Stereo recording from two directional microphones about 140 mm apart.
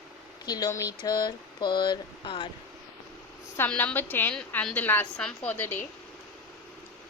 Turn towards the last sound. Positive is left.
turn(degrees=15)  # may be behind; listen again after turning